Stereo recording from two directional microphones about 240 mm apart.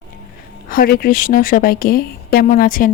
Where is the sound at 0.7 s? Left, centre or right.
Left.